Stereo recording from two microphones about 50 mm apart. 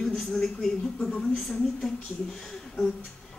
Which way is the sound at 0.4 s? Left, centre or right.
Centre.